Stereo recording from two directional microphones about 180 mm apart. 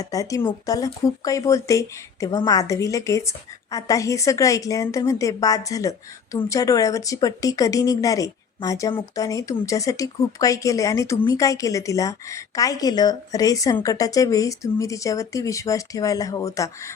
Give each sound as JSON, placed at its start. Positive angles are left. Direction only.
{"t": 0.0, "sound": "a woman's voice", "side_deg": 20}